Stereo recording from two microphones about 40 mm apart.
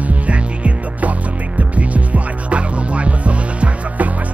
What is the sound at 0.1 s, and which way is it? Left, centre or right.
Music, right.